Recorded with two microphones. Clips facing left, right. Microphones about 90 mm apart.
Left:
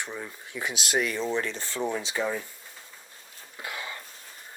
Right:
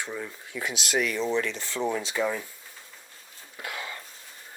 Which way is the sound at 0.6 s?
30° left (ahead or behind).